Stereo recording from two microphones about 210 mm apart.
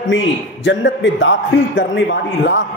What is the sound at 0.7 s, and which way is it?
Speech, 60° left (ahead or behind).